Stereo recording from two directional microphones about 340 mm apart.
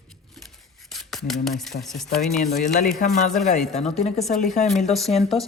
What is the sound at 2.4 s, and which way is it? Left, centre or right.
Speech, left.